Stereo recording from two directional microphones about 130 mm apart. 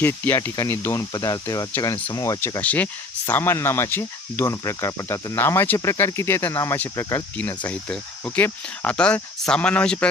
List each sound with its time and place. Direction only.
0.0 s speech: 15° left (ahead or behind)
0.5 s speech: 30° left (ahead or behind)
2.6 s speech: 10° left (ahead or behind)